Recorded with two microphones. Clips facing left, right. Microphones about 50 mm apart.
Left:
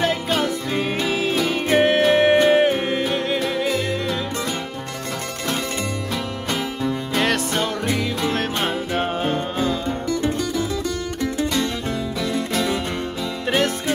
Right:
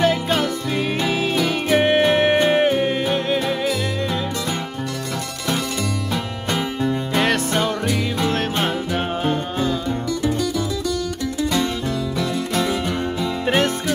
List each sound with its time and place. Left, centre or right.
0.0 s music: centre
6.5 s music: centre
9.8 s music: left
13.2 s music: centre